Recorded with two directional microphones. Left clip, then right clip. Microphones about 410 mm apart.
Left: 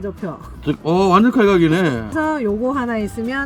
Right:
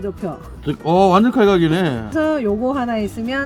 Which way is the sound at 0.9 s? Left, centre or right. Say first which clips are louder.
Right 1 dB; centre.